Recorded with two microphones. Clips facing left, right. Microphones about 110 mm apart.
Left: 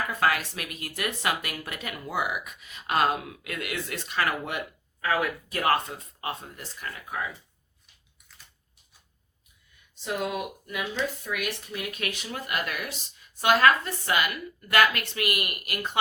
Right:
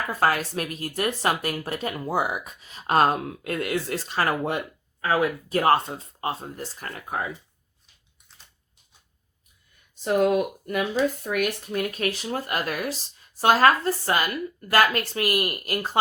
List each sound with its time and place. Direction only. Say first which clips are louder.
0.1 s speech: right 6 dB; 35° right (ahead or behind)
9.9 s speech: right 9 dB; 45° right (ahead or behind)